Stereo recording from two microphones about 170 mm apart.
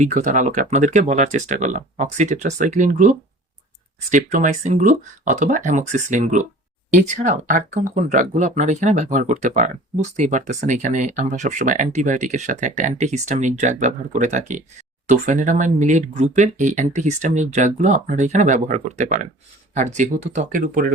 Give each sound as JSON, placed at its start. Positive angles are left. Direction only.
{"t": 0.0, "sound": "speech", "side_deg": -45}